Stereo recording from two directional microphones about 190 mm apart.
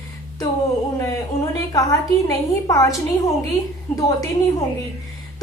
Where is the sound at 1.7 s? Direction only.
15° left (ahead or behind).